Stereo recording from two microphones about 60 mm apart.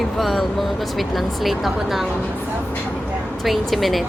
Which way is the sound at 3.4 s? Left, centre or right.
Centre.